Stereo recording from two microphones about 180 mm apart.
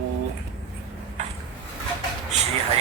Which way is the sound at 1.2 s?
40° right (ahead or behind).